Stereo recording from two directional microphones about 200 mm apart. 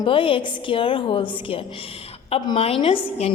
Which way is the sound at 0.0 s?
25° left (ahead or behind).